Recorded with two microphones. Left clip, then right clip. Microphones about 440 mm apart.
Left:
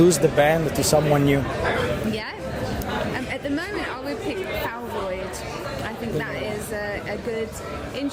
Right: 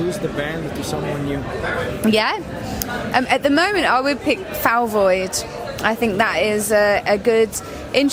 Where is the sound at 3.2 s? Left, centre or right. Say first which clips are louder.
Right 12 dB; right.